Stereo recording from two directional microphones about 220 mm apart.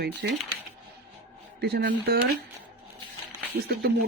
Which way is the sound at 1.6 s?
50° right (ahead or behind).